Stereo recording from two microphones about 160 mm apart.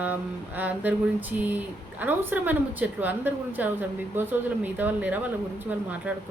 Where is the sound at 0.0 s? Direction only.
10° right (ahead or behind).